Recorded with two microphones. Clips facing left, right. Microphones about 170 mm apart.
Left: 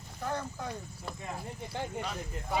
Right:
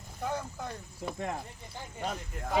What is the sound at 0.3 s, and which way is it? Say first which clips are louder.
Speech: even; 10° right (ahead or behind).